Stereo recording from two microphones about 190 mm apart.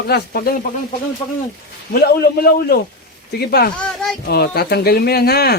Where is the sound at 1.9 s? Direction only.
55° left (ahead or behind).